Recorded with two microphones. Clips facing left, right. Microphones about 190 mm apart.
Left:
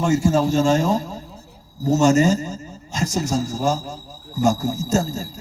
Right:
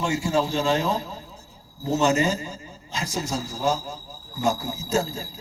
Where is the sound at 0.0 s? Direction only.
50° left (ahead or behind).